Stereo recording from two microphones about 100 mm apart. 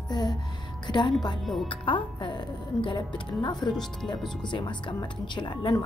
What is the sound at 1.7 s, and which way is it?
A woman's voice, 55° left (ahead or behind).